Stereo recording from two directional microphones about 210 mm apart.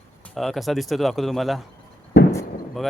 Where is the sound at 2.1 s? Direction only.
50° left (ahead or behind).